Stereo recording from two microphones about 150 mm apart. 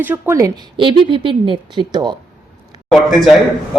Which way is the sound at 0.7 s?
35° right (ahead or behind).